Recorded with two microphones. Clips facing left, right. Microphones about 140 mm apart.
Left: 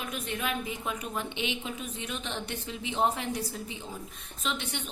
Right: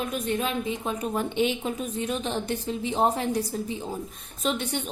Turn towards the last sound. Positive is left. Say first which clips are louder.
# right 7 dB
turn(degrees=-40)  # may be behind; listen again after turning